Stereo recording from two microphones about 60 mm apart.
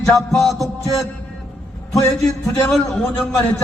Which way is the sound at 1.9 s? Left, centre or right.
Left.